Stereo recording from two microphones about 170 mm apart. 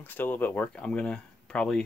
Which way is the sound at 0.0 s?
10° left (ahead or behind).